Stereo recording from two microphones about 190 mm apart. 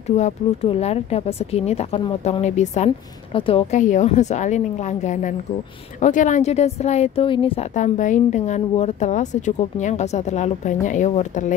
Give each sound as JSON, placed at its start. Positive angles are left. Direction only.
{"t": 0.0, "sound": "a woman's voice", "side_deg": 35}
{"t": 3.7, "sound": "a woman's voice", "side_deg": 40}
{"t": 7.7, "sound": "a woman's voice", "side_deg": 40}